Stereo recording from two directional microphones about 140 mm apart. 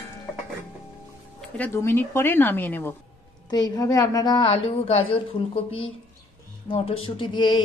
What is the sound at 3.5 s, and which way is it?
Speech, 30° left (ahead or behind).